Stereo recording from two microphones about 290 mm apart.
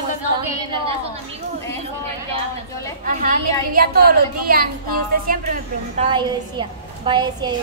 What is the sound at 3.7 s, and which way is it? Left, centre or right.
A woman's voice, right.